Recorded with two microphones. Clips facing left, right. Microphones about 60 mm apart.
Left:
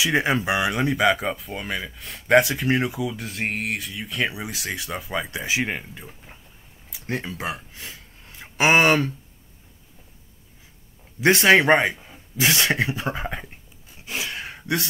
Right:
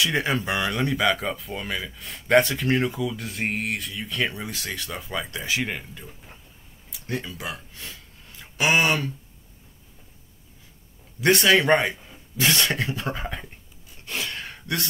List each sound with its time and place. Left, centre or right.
0.0 s speech: centre
7.2 s speech: left
7.7 s speech: centre
8.3 s a sound: left
11.4 s speech: left
11.7 s speech: centre
13.0 s a sound: centre